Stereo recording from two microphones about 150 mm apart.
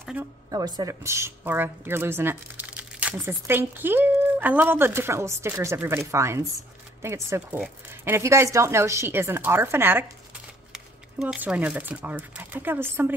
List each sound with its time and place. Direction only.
0.2 s a woman's voice: 10° right (ahead or behind)
0.5 s a woman's voice: 25° right (ahead or behind)
10.7 s speech: 5° right (ahead or behind)